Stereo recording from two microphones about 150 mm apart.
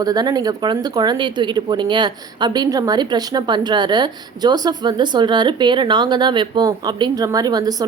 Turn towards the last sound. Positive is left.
turn(degrees=-25)  # may be behind; listen again after turning